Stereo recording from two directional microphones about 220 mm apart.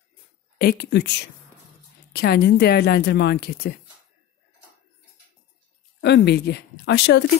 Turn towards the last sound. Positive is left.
turn(degrees=50)  # may be behind; listen again after turning